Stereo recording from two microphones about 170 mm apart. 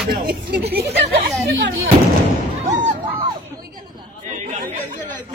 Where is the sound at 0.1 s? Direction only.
65° right (ahead or behind).